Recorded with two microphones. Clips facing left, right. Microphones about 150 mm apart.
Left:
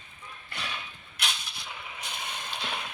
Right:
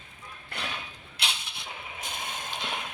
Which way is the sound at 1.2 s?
25° right (ahead or behind).